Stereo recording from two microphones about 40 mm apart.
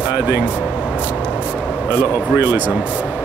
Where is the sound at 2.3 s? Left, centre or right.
Right.